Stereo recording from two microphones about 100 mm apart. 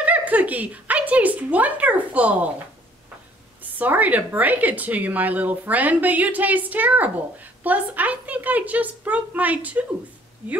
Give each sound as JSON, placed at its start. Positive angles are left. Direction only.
{"t": 0.0, "sound": "a woman's voice", "side_deg": -15}
{"t": 3.6, "sound": "a woman's voice", "side_deg": -15}